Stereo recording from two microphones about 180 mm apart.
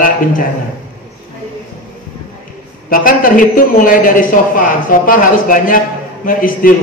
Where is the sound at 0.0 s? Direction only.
50° left (ahead or behind).